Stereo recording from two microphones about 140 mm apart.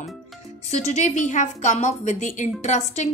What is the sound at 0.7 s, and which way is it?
A woman's voice, 55° left (ahead or behind).